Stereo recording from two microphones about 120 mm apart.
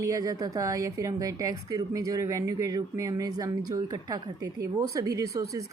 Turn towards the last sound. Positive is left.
turn(degrees=-25)  # may be behind; listen again after turning